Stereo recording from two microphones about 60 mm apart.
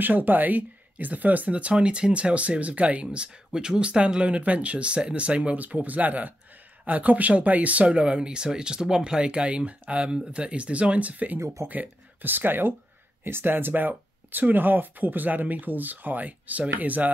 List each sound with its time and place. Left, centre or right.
0.0 s speech: right
11.3 s speech: right
11.6 s speech: right